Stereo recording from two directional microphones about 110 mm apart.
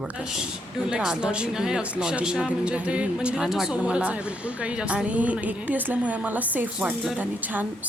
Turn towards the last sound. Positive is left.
turn(degrees=-15)  # may be behind; listen again after turning